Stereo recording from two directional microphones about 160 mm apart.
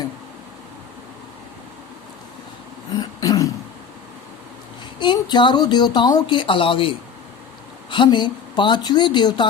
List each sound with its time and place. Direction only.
2.9 s throat clearing: 25° left (ahead or behind)
4.9 s speech: 30° left (ahead or behind)